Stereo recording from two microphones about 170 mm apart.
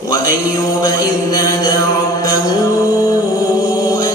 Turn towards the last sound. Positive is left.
turn(degrees=20)  # may be behind; listen again after turning